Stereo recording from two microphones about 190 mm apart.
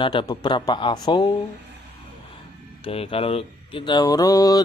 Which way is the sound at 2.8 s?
30° left (ahead or behind).